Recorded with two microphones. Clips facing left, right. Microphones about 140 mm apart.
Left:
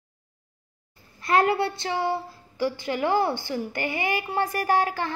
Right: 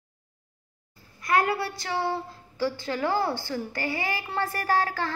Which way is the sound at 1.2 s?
25° left (ahead or behind).